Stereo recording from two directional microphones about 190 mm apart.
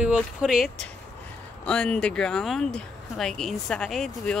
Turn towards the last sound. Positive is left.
turn(degrees=5)  # may be behind; listen again after turning